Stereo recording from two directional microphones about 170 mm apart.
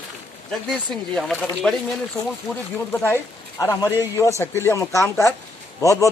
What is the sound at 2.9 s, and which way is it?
A man's voice, 15° left (ahead or behind).